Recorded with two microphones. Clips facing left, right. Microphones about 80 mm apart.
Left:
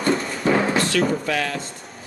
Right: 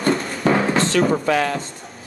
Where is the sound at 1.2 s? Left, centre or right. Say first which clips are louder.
Right 5 dB; right.